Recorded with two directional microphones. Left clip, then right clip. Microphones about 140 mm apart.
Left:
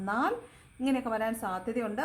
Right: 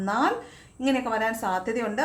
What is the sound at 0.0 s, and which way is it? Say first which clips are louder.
A woman's voice: right 6 dB; 20° left (ahead or behind).